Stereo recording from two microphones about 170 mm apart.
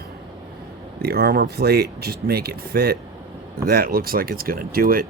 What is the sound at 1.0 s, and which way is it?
Speech, 65° right (ahead or behind).